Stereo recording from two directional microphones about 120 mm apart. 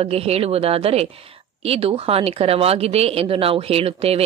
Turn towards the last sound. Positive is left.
turn(degrees=-55)  # may be behind; listen again after turning